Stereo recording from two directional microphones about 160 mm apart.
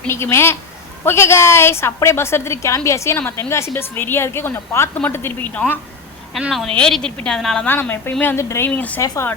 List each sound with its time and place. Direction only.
0.1 s a woman's voice: 15° left (ahead or behind)
6.3 s a woman's voice: centre (ahead or behind); by 9.3 s 20° left (ahead or behind)